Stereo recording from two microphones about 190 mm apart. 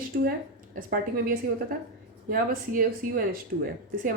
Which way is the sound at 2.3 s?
50° right (ahead or behind).